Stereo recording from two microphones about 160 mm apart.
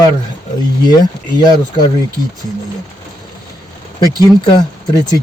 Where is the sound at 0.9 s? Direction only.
25° left (ahead or behind).